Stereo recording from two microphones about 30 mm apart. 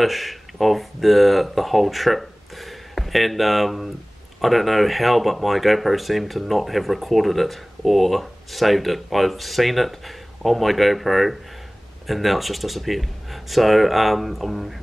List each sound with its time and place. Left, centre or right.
0.0 s speech: centre